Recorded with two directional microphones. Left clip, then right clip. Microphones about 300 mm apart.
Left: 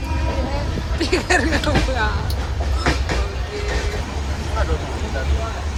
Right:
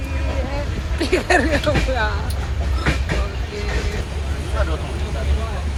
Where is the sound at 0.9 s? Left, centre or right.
Centre.